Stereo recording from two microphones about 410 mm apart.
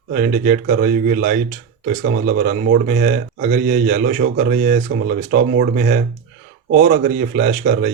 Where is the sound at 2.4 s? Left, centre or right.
Centre.